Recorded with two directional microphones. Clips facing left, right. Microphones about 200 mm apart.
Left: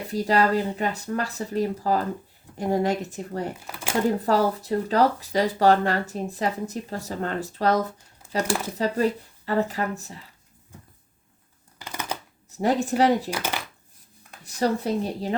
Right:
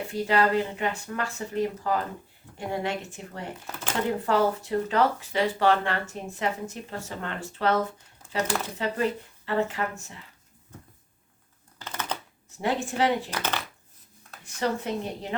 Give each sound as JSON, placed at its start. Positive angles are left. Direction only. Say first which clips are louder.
{"t": 0.1, "sound": "speech", "louder": "left 2 dB", "side_deg": 35}
{"t": 3.7, "sound": "a sound", "louder": "left 1 dB", "side_deg": 10}
{"t": 4.2, "sound": "speech", "louder": "left 2 dB", "side_deg": 35}
{"t": 11.8, "sound": "a sound", "louder": "left 1 dB", "side_deg": 10}
{"t": 12.5, "sound": "speech", "louder": "left 5 dB", "side_deg": 40}
{"t": 13.3, "sound": "speech", "louder": "left 1 dB", "side_deg": 10}
{"t": 14.4, "sound": "speech", "louder": "left 4 dB", "side_deg": 35}